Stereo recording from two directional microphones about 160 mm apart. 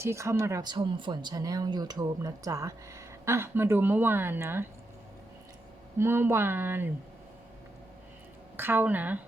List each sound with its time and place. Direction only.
0.0 s speech: 15° right (ahead or behind)
6.0 s speech: 15° right (ahead or behind)
8.5 s speech: 10° right (ahead or behind)